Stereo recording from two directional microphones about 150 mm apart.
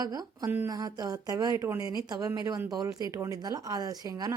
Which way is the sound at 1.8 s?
35° left (ahead or behind).